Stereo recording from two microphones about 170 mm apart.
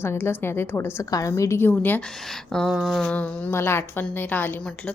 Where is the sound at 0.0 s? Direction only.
15° left (ahead or behind).